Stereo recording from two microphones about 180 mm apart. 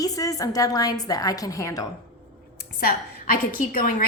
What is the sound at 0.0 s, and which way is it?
A woman's voice, 20° left (ahead or behind).